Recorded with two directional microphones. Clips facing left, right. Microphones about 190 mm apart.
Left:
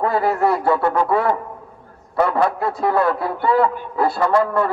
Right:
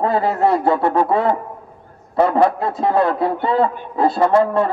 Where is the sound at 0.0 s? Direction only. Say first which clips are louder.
Right 1 dB; 25° right (ahead or behind).